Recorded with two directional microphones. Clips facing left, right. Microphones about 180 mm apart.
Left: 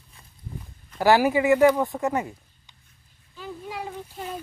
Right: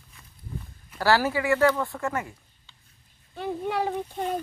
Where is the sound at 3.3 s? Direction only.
65° right (ahead or behind).